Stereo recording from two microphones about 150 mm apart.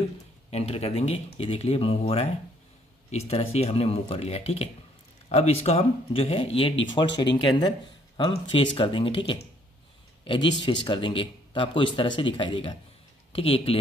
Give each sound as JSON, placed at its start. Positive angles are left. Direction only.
{"t": 0.5, "sound": "speech", "side_deg": 45}